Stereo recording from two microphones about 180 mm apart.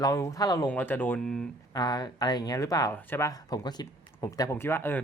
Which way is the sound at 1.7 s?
20° left (ahead or behind).